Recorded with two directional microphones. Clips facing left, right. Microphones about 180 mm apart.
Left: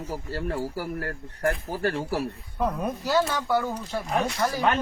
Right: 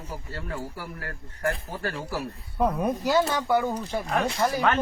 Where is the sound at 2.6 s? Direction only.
5° right (ahead or behind).